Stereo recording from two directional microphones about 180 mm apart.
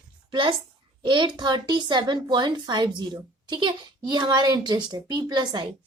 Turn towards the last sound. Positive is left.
turn(degrees=-25)  # may be behind; listen again after turning